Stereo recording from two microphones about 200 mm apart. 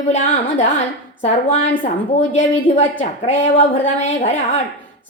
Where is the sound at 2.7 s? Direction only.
25° left (ahead or behind).